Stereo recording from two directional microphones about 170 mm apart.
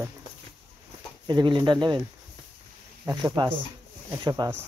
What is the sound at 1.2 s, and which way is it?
Speech, 25° right (ahead or behind).